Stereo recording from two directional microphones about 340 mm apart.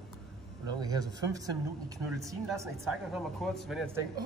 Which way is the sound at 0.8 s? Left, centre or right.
Centre.